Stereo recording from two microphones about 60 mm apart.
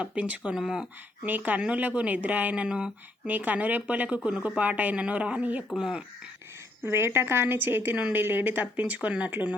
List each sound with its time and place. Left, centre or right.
0.0 s a woman's voice: right
0.5 s speech: centre
1.2 s a woman's voice: right
3.2 s a woman's voice: right
5.6 s speech: centre
6.8 s a woman's voice: right